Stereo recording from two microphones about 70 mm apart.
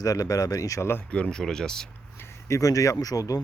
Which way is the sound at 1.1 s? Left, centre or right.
Centre.